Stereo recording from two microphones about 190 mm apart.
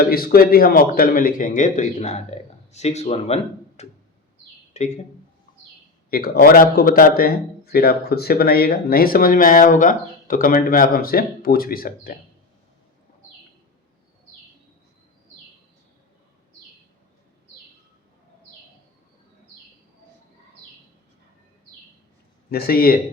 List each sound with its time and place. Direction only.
0.0 s speech: 50° left (ahead or behind)
6.1 s speech: 50° left (ahead or behind)
22.4 s speech: 50° left (ahead or behind)